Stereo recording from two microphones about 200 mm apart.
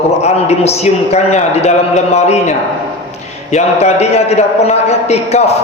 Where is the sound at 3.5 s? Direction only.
35° left (ahead or behind).